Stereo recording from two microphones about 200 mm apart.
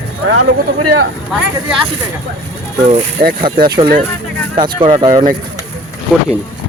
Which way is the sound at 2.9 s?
45° right (ahead or behind).